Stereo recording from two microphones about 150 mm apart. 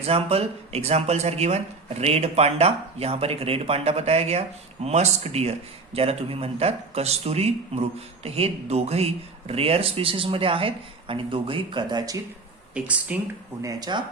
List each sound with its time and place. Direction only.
0.0 s speech: 40° right (ahead or behind)
12.7 s speech: 10° right (ahead or behind)
13.6 s speech: 25° right (ahead or behind)